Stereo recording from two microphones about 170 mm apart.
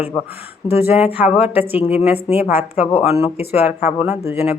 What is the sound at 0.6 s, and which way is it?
Speech, 15° right (ahead or behind).